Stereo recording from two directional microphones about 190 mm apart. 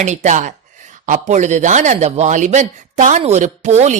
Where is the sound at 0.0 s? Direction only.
40° right (ahead or behind).